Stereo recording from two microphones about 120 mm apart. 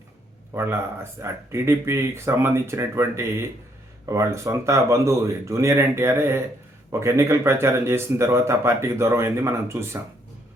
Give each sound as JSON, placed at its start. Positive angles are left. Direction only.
{"t": 0.5, "sound": "speech", "side_deg": -20}